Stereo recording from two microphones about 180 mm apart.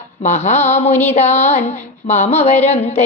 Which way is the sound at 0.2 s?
40° left (ahead or behind).